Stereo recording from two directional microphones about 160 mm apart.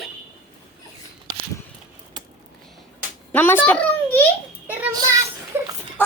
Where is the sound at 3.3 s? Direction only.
10° left (ahead or behind).